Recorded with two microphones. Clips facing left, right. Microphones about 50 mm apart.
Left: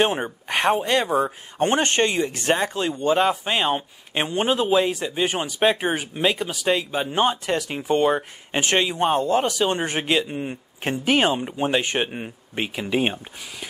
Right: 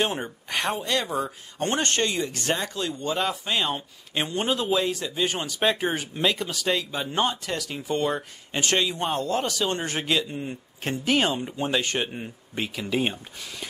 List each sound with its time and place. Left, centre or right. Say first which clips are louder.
0.0 s speech: left 5 dB; left